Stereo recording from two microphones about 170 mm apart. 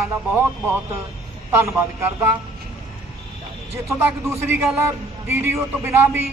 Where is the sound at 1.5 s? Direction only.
15° right (ahead or behind).